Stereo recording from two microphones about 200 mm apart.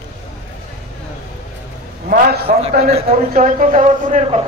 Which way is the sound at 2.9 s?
30° right (ahead or behind).